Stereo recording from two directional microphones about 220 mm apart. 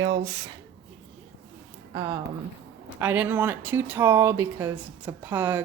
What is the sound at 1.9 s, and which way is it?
Speech, 20° right (ahead or behind).